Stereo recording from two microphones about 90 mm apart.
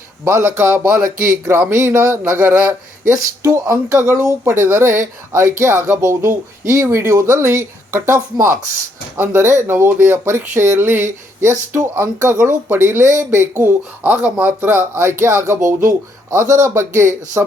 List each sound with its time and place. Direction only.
0.3 s speech: 30° right (ahead or behind)
2.4 s speech: 20° right (ahead or behind)
3.4 s speech: 30° right (ahead or behind)